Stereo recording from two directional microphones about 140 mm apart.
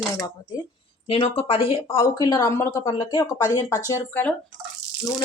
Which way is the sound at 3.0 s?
35° left (ahead or behind).